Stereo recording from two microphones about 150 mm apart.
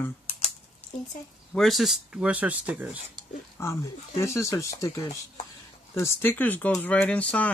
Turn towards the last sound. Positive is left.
turn(degrees=10)  # may be behind; listen again after turning